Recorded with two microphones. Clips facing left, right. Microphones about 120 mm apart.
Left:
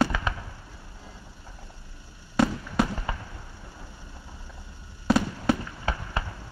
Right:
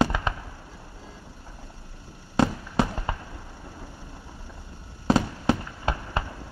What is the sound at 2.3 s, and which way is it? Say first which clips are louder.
Fireworks: right 1 dB; 25° right (ahead or behind).